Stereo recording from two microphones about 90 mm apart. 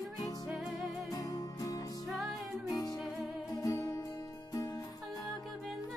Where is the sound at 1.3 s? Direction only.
40° left (ahead or behind).